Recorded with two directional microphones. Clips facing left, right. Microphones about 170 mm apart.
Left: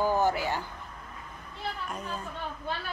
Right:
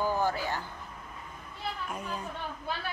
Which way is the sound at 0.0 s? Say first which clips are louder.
Left 3 dB; 15° left (ahead or behind).